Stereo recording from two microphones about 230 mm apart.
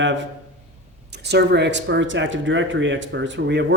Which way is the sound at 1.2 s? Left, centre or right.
Right.